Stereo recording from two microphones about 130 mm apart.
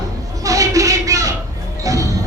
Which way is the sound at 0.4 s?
25° right (ahead or behind).